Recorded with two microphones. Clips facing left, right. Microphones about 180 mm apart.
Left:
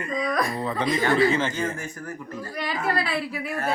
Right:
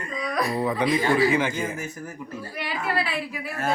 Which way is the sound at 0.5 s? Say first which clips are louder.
Right 3 dB; 15° right (ahead or behind).